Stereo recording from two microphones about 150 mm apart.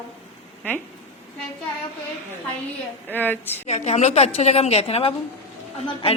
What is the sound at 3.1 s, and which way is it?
Speech, 10° left (ahead or behind).